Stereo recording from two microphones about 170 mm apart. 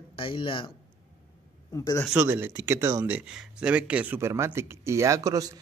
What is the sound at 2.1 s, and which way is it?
Speech, 10° right (ahead or behind).